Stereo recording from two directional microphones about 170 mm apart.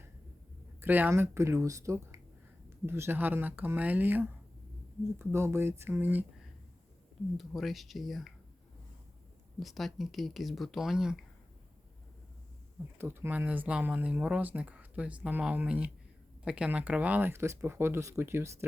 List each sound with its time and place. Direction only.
0.8 s speech: 10° right (ahead or behind)
5.3 s speech: 15° right (ahead or behind)
7.3 s speech: centre (ahead or behind)
9.6 s speech: centre (ahead or behind)
13.0 s speech: 15° right (ahead or behind)